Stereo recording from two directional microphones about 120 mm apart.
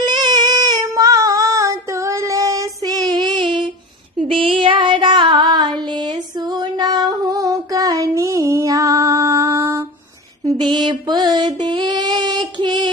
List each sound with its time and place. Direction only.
0.0 s child singing: 35° right (ahead or behind)
5.9 s female singing: 35° right (ahead or behind); by 9.8 s 20° right (ahead or behind)
10.4 s mantra: 40° right (ahead or behind)
11.6 s female singing: 35° right (ahead or behind)